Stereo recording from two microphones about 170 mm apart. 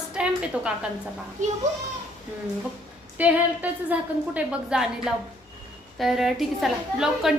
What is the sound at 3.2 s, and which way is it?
A woman's voice, 10° right (ahead or behind).